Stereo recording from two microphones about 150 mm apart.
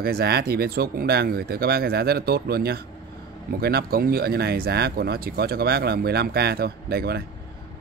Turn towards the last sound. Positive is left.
turn(degrees=-90)